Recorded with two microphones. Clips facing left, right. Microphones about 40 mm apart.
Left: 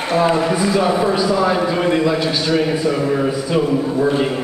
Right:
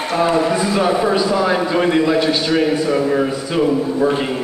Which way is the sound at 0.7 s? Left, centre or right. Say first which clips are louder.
Even; centre.